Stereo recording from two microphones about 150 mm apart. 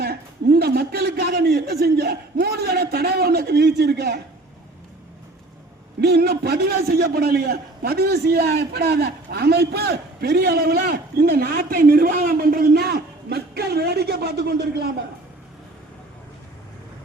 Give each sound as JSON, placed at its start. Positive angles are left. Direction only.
{"t": 0.0, "sound": "a man's voice", "side_deg": -90}
{"t": 6.0, "sound": "a man's voice", "side_deg": -90}